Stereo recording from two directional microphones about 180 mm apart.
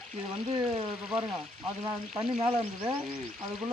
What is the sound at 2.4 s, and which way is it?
Speech, 25° right (ahead or behind).